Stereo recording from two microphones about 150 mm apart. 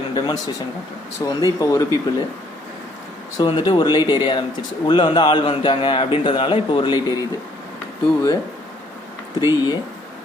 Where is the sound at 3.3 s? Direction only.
30° left (ahead or behind).